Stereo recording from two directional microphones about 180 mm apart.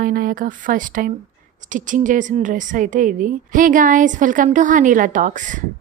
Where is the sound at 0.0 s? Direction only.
50° right (ahead or behind).